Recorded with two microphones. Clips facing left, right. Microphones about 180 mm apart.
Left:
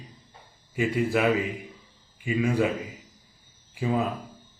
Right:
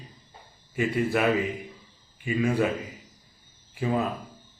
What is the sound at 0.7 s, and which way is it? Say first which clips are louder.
Speech: left 1 dB; 10° left (ahead or behind).